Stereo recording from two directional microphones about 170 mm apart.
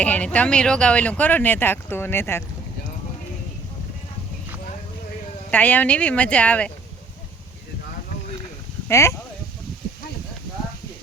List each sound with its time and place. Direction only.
0.0 s speech: 10° left (ahead or behind)
5.5 s speech: 10° left (ahead or behind)
8.9 s speech: 15° left (ahead or behind)